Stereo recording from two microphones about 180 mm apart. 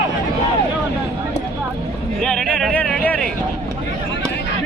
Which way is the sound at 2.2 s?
Centre (ahead or behind).